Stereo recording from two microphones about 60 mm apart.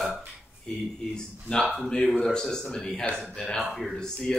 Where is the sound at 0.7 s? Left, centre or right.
Centre.